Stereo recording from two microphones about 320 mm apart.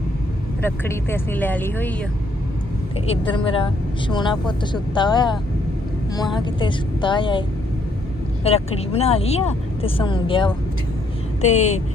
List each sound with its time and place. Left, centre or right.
0.6 s speech: centre
3.1 s speech: centre
6.4 s speech: centre
8.4 s speech: centre